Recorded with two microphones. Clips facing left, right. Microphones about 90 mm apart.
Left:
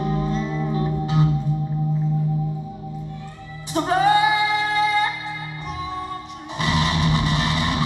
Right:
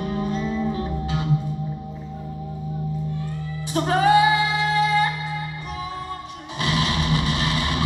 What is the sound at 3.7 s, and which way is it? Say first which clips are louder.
Music: left 1 dB; 30° left (ahead or behind).